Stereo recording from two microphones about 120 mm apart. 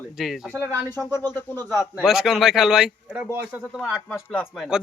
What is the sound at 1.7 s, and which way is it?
Speech, 20° right (ahead or behind).